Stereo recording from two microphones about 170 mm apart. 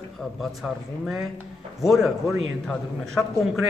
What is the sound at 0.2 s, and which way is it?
Speech, centre (ahead or behind).